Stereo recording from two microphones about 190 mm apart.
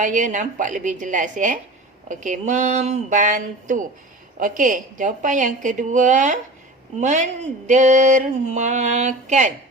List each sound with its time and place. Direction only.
0.0 s a woman's voice: 40° right (ahead or behind)